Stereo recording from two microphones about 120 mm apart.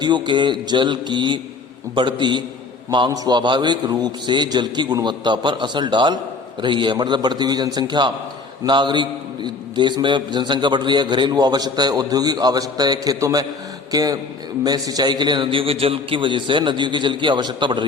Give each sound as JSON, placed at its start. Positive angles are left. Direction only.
{"t": 0.0, "sound": "a man's voice", "side_deg": -40}